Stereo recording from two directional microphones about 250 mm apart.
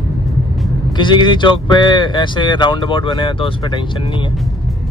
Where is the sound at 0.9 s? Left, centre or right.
Centre.